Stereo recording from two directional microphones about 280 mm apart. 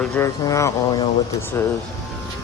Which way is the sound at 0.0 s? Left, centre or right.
Centre.